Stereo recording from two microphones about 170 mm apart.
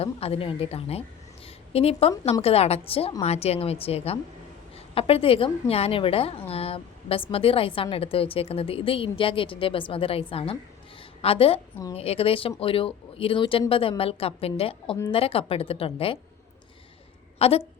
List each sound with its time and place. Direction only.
0.0 s a woman's voice: 35° left (ahead or behind)
17.3 s a woman's voice: 35° left (ahead or behind)